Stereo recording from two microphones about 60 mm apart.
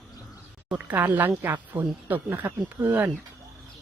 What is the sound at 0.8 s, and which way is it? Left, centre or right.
A woman's voice, right.